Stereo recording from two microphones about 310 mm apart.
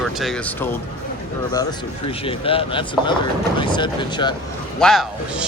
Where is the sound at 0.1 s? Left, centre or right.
Centre.